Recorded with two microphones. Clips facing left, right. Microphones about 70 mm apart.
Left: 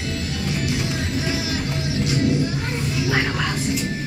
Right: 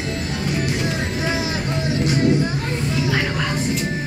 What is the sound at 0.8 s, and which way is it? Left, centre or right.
Music, right.